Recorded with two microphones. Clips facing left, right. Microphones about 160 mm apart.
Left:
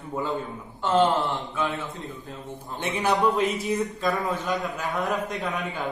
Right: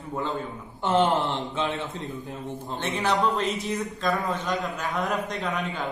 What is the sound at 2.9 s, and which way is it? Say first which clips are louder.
Speech: left 2 dB; 15° left (ahead or behind).